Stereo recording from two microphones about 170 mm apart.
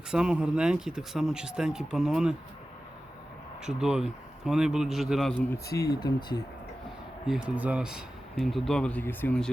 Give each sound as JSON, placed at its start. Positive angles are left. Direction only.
{"t": 0.1, "sound": "speech", "side_deg": -5}
{"t": 3.6, "sound": "speech", "side_deg": -5}
{"t": 5.5, "sound": "speech", "side_deg": 20}
{"t": 7.3, "sound": "speech", "side_deg": -5}